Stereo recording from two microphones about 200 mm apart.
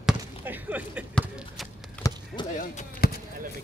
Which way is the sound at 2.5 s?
40° left (ahead or behind).